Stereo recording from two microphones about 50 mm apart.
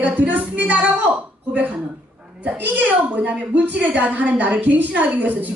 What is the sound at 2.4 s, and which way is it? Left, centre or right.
A woman's voice, right.